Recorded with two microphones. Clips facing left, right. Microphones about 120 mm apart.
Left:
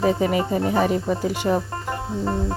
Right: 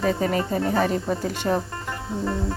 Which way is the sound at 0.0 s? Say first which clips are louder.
Left 3 dB; 15° left (ahead or behind).